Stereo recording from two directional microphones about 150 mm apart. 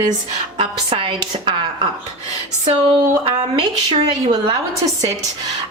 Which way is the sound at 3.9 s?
30° right (ahead or behind).